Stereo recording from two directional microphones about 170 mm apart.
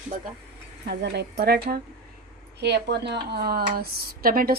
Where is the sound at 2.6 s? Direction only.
80° right.